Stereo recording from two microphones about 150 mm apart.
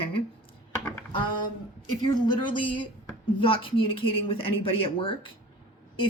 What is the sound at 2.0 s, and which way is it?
Speech, 30° left (ahead or behind).